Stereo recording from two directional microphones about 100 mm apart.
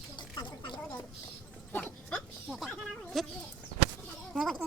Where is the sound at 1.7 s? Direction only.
20° left (ahead or behind).